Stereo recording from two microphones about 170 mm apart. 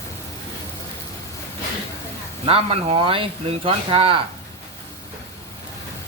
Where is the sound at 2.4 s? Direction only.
35° right (ahead or behind).